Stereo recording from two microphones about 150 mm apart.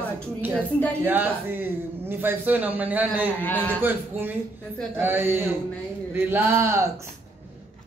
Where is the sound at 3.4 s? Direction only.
10° left (ahead or behind).